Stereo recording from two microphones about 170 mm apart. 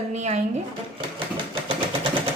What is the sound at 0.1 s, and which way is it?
Speech, 40° right (ahead or behind).